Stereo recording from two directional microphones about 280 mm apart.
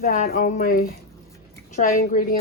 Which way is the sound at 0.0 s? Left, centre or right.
Left.